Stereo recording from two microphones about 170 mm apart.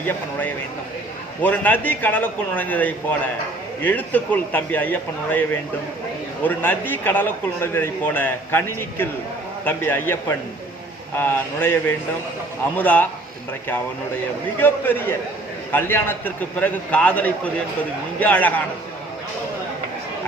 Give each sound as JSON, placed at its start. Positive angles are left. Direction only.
{"t": 0.0, "sound": "speech", "side_deg": 10}
{"t": 6.4, "sound": "speech", "side_deg": 10}
{"t": 14.6, "sound": "speech", "side_deg": 10}